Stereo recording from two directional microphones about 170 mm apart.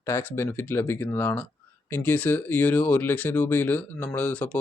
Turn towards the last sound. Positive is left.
turn(degrees=10)  # may be behind; listen again after turning